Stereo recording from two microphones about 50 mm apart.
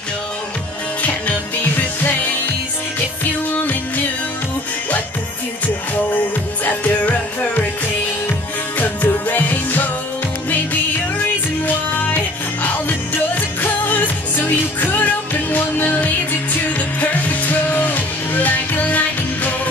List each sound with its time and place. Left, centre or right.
8.7 s music: left
12.6 s music: left